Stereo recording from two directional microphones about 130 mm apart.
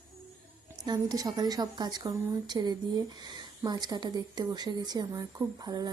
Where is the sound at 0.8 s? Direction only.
30° right (ahead or behind).